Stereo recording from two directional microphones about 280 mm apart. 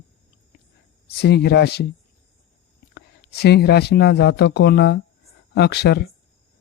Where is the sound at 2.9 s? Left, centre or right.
Left.